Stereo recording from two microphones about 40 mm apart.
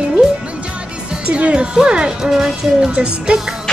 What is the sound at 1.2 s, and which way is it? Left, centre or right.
Speech, right.